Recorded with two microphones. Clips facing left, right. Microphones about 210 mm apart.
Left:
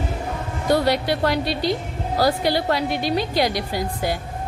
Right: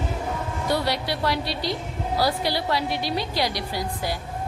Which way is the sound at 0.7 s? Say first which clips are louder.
Left 7 dB; 50° left (ahead or behind).